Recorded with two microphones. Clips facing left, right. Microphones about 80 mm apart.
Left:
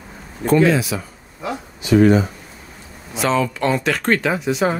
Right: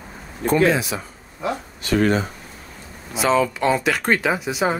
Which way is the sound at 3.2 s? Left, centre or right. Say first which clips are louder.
Even; centre.